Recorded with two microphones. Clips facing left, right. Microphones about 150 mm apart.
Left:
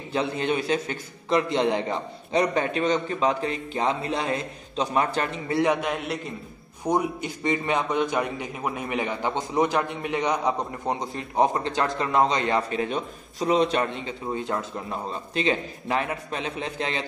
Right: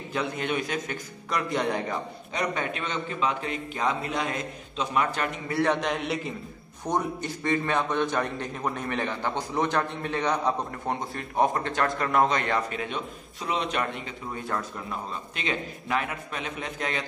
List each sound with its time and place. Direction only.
0.1 s a man's voice: 30° left (ahead or behind)
2.5 s a man's voice: 35° left (ahead or behind)
5.6 s a man's voice: 10° left (ahead or behind)
6.8 s a man's voice: 10° left (ahead or behind)
12.9 s a man's voice: 35° left (ahead or behind)